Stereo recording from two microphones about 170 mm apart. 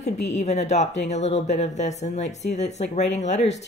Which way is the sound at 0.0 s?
40° left (ahead or behind).